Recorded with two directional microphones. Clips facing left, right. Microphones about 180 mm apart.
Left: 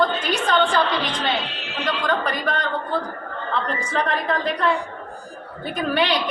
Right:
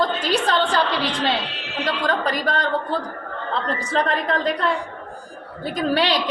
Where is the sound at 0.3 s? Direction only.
35° right (ahead or behind).